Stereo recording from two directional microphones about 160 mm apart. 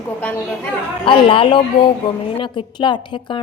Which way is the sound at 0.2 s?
10° left (ahead or behind).